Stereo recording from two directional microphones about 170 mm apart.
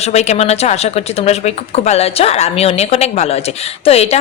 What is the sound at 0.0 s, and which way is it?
Speech, 40° left (ahead or behind).